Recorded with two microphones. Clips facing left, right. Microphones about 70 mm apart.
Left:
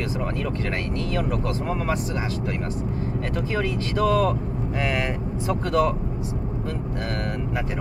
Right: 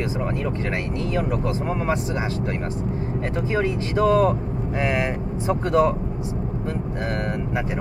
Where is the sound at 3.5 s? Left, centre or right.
Right.